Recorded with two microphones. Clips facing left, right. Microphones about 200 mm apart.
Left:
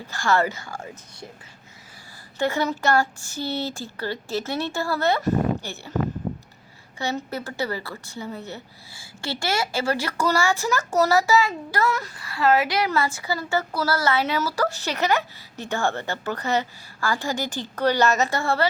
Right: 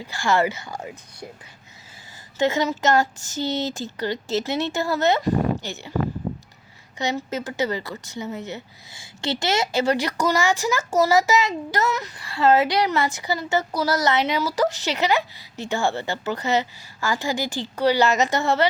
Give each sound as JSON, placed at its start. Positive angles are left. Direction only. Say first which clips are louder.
{"t": 0.0, "sound": "a woman's voice", "louder": "right 1 dB", "side_deg": -15}
{"t": 2.4, "sound": "speech", "louder": "right 2 dB", "side_deg": -15}
{"t": 3.3, "sound": "a sound", "louder": "right 3 dB", "side_deg": 10}
{"t": 3.8, "sound": "speech", "louder": "right 3 dB", "side_deg": -20}
{"t": 7.0, "sound": "a woman's voice", "louder": "right 2 dB", "side_deg": -20}